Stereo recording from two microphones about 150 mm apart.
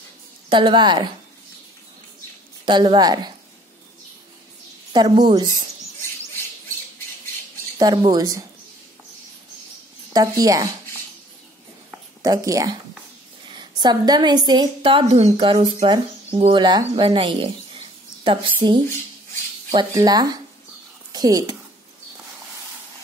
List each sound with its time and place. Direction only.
0.5 s a woman's voice: 30° right (ahead or behind)
2.6 s a woman's voice: 30° right (ahead or behind)
4.9 s a woman's voice: 25° right (ahead or behind)
7.8 s a woman's voice: 30° right (ahead or behind)
10.1 s a woman's voice: 25° right (ahead or behind)
12.2 s a woman's voice: 25° right (ahead or behind)
19.9 s a woman's voice: 25° right (ahead or behind)